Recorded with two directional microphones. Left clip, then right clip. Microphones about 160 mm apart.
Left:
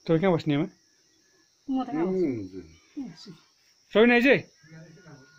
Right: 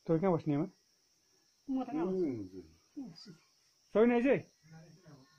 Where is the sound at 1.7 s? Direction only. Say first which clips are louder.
Left 8 dB; 10° right (ahead or behind).